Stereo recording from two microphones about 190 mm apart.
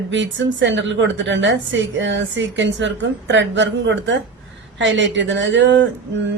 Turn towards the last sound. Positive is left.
turn(degrees=-70)  # may be behind; listen again after turning